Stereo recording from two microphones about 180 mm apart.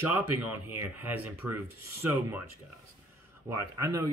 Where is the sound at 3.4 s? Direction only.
15° right (ahead or behind).